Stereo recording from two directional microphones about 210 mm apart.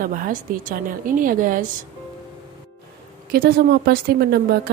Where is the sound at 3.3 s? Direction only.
45° right (ahead or behind).